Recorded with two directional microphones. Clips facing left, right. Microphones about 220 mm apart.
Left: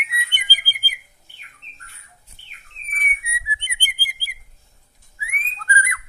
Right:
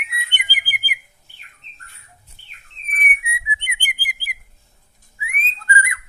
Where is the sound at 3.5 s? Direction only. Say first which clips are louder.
Right 3 dB; 20° right (ahead or behind).